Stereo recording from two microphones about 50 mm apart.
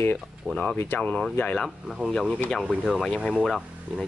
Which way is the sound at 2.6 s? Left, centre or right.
Centre.